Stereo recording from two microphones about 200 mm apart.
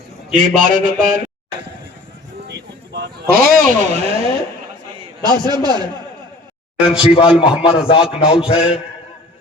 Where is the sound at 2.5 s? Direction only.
60° right (ahead or behind); by 4.3 s 30° right (ahead or behind).